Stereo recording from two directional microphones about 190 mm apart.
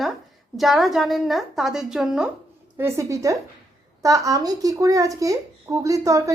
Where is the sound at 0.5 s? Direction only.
Centre (ahead or behind).